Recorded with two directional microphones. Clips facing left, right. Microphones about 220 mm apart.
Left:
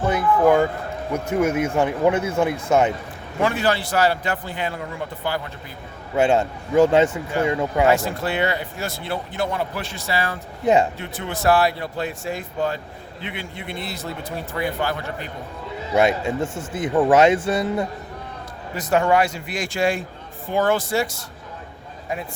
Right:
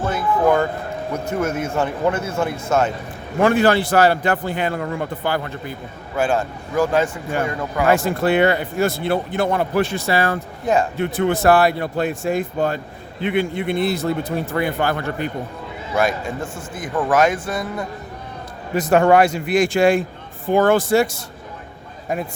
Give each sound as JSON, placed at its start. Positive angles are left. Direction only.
{"t": 0.0, "sound": "speech", "side_deg": 15}
{"t": 3.4, "sound": "speech", "side_deg": -55}
{"t": 6.1, "sound": "a man's voice", "side_deg": 25}
{"t": 7.9, "sound": "speech", "side_deg": -55}
{"t": 16.0, "sound": "a man's voice", "side_deg": 25}
{"t": 18.7, "sound": "a man's voice", "side_deg": -55}